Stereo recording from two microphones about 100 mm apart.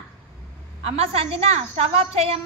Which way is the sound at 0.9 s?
85° right.